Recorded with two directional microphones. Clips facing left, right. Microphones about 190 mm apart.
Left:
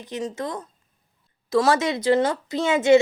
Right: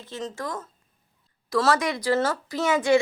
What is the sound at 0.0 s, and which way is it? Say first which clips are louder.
A woman's voice: left 4 dB; 15° left (ahead or behind).